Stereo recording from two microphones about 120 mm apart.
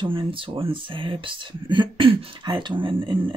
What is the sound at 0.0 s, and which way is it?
Speech, 45° right (ahead or behind).